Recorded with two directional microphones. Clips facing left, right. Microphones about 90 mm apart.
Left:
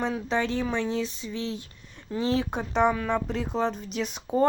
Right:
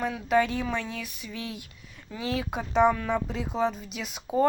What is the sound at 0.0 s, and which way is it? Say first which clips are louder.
Speech: right 2 dB; 25° left (ahead or behind).